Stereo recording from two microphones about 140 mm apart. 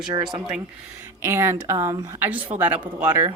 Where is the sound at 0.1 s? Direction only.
30° right (ahead or behind).